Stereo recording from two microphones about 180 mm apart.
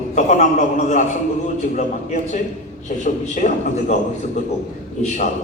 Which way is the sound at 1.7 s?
40° left (ahead or behind).